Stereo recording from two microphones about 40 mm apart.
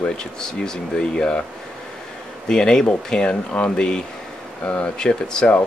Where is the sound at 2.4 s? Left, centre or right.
Centre.